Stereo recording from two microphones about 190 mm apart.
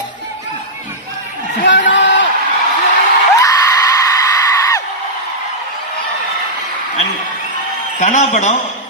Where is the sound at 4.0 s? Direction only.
20° left (ahead or behind).